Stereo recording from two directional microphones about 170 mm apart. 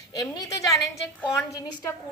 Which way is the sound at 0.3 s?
20° left (ahead or behind).